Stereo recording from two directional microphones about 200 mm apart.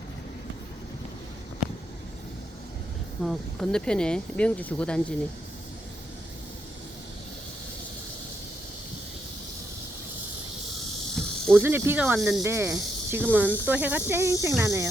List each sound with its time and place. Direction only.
3.2 s speech: 5° left (ahead or behind)
11.2 s cricket: centre (ahead or behind)
11.6 s speech: 10° right (ahead or behind)